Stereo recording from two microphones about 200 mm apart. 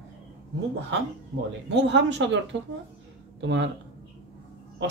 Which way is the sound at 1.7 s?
60° right (ahead or behind).